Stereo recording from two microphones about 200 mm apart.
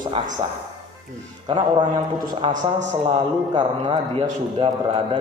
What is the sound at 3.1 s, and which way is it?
A man's voice, 25° right (ahead or behind).